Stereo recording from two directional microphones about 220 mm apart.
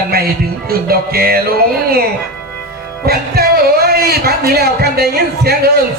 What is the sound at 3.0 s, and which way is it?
Speech, 45° right (ahead or behind).